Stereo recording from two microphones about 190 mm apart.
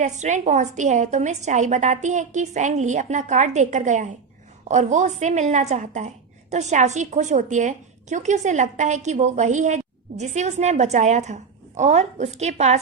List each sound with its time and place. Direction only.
0.0 s a woman's voice: 40° right (ahead or behind)